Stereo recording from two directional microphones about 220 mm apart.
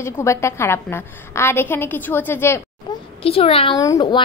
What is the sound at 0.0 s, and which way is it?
A woman's voice, 15° left (ahead or behind).